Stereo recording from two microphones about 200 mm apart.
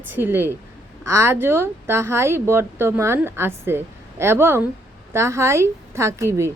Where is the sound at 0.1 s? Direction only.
10° right (ahead or behind).